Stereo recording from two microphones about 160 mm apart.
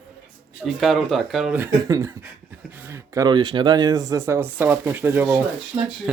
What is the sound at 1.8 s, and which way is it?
Speech, 20° right (ahead or behind).